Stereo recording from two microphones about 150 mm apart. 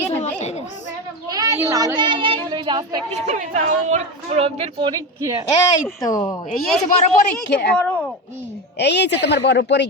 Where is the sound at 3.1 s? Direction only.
50° right (ahead or behind).